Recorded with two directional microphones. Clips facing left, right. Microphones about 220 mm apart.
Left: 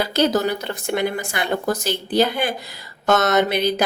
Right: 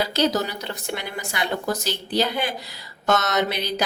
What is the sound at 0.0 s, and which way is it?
A woman's voice, 50° left (ahead or behind).